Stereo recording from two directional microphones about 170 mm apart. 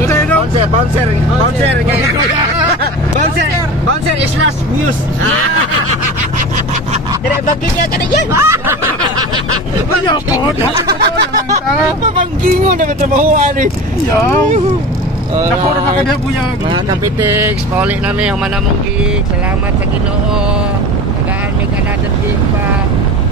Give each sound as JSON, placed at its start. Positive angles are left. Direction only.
{"t": 0.0, "sound": "vehicle", "side_deg": 15}
{"t": 2.8, "sound": "hubbub", "side_deg": -65}
{"t": 8.3, "sound": "music", "side_deg": -15}
{"t": 10.0, "sound": "a sound", "side_deg": 25}
{"t": 11.5, "sound": "speech", "side_deg": -45}
{"t": 14.1, "sound": "speech", "side_deg": 15}
{"t": 16.6, "sound": "speech", "side_deg": -25}
{"t": 17.2, "sound": "speech", "side_deg": -10}